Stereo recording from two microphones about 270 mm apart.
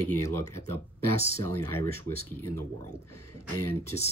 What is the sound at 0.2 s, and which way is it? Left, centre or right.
Speech, centre.